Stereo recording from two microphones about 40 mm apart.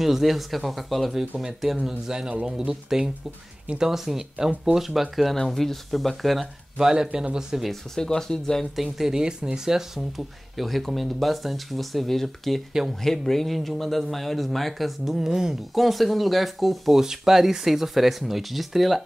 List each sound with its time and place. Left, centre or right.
0.0 s speech: centre
6.8 s speech: centre
7.9 s speech: centre
8.7 s speech: centre
9.1 s speech: right
9.8 s speech: centre